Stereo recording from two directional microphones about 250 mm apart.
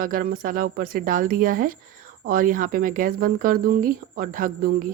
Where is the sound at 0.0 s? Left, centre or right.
Right.